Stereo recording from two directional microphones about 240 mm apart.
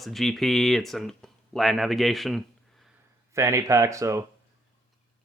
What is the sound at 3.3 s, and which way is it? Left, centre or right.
Speech, centre.